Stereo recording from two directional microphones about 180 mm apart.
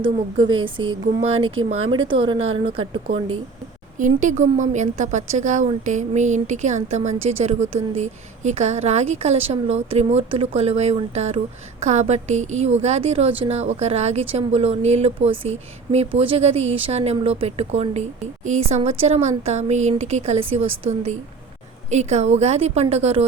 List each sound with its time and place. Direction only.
0.0 s speech: 30° right (ahead or behind)
3.9 s a woman's voice: 45° right (ahead or behind)